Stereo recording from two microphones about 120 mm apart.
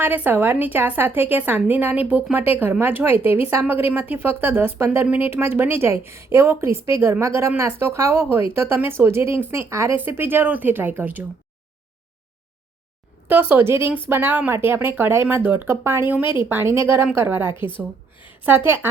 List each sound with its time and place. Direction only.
0.0 s a woman's voice: 15° right (ahead or behind)
13.2 s a woman's voice: 15° right (ahead or behind)